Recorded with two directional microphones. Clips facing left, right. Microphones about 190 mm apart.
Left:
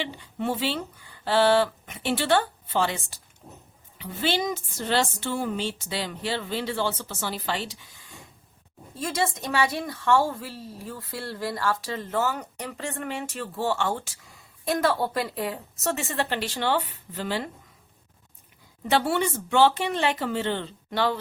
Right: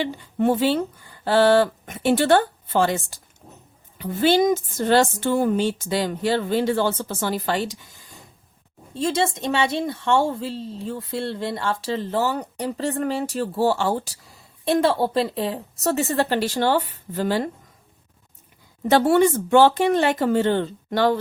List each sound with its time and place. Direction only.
0.0 s speech: 45° right (ahead or behind)
8.9 s a woman's voice: 25° right (ahead or behind); by 17.5 s 45° right (ahead or behind)
18.9 s speech: 45° right (ahead or behind)